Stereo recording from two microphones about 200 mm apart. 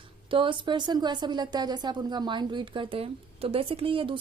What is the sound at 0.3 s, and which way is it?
Speech, 25° right (ahead or behind).